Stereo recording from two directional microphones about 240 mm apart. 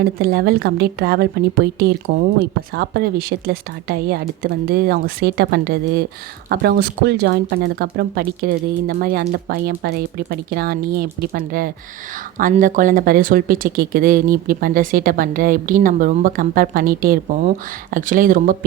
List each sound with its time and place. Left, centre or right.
0.0 s speech: right